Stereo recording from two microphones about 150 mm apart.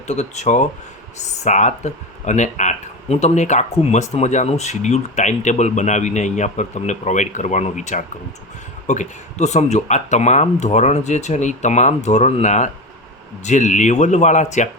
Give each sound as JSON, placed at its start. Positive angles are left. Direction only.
{"t": 0.1, "sound": "speech", "side_deg": 50}